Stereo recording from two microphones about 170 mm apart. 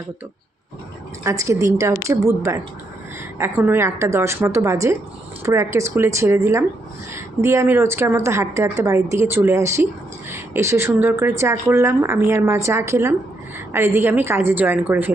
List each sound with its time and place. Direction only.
1.2 s speech: 20° right (ahead or behind)